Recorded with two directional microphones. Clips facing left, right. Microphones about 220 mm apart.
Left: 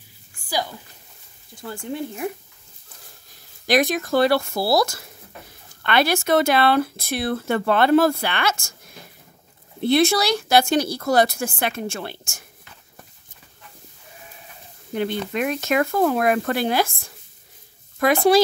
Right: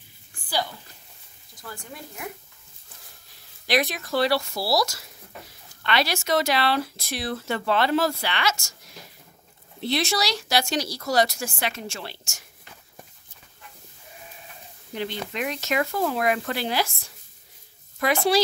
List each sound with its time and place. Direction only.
1.5 s speech: 30° left (ahead or behind)
3.6 s speech: 45° left (ahead or behind)
15.0 s speech: 50° left (ahead or behind)